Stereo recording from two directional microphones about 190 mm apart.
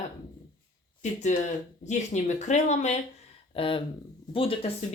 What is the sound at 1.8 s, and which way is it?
Speech, 40° left (ahead or behind).